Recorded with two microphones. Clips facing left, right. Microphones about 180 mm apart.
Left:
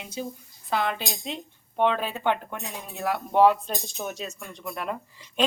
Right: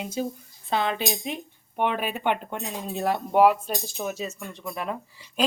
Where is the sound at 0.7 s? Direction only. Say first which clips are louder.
Right 2 dB; 20° right (ahead or behind).